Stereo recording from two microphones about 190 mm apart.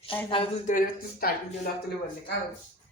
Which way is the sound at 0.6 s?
45° left (ahead or behind).